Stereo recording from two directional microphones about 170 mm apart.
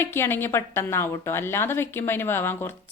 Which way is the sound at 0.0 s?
15° left (ahead or behind).